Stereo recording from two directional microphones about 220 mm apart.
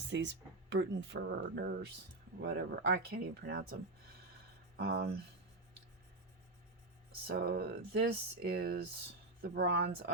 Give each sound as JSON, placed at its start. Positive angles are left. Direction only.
{"t": 0.1, "sound": "speech", "side_deg": -55}
{"t": 4.8, "sound": "speech", "side_deg": -45}
{"t": 7.3, "sound": "speech", "side_deg": -45}